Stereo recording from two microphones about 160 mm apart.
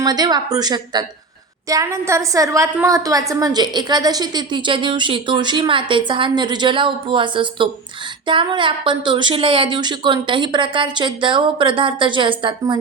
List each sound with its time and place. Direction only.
0.0 s a woman's voice: 25° right (ahead or behind)